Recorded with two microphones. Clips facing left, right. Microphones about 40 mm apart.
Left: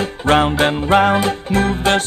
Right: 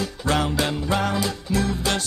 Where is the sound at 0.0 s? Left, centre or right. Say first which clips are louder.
Left 8 dB; left.